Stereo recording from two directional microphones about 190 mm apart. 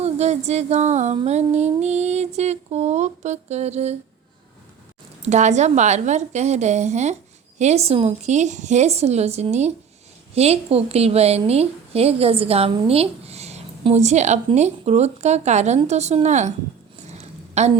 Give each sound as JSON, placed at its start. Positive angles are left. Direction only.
{"t": 0.0, "sound": "a woman's voice", "side_deg": -35}
{"t": 5.2, "sound": "a woman's voice", "side_deg": -40}
{"t": 17.1, "sound": "a sound", "side_deg": -35}